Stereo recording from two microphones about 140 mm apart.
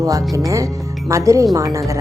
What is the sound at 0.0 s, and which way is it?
Speech, 25° right (ahead or behind).